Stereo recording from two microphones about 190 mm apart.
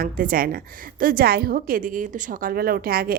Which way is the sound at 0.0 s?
45° right (ahead or behind).